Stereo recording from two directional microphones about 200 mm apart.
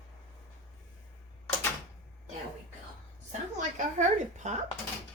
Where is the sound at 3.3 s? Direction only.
35° right (ahead or behind).